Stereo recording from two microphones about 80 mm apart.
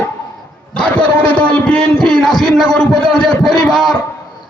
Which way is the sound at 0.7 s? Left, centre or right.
Centre.